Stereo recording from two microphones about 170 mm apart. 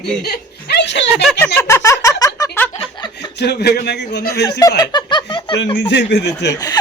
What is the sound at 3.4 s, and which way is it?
A man's voice, 75° left (ahead or behind).